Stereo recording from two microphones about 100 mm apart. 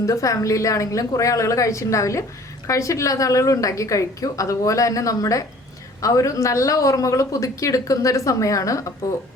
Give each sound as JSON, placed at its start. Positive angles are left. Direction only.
{"t": 0.0, "sound": "a woman's voice", "side_deg": 35}